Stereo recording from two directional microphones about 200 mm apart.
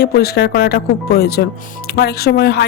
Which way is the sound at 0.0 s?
55° left (ahead or behind).